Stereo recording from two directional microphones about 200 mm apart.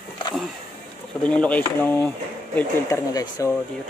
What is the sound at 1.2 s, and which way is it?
Speech, 5° left (ahead or behind).